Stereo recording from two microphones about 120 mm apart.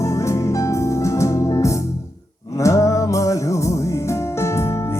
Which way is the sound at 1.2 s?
25° left (ahead or behind).